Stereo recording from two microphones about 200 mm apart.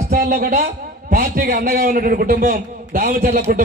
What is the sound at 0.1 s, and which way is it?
A man's voice, 45° right (ahead or behind).